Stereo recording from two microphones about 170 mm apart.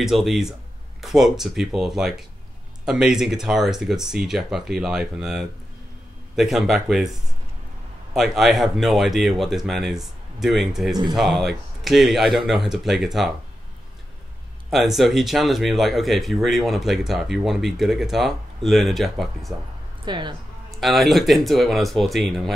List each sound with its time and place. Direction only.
0.0 s speech: centre (ahead or behind)
14.7 s speech: centre (ahead or behind)
20.1 s a woman's voice: 25° right (ahead or behind)
20.8 s speech: centre (ahead or behind)